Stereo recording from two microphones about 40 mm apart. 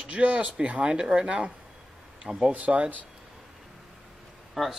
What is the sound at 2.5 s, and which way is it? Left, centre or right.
Speech, right.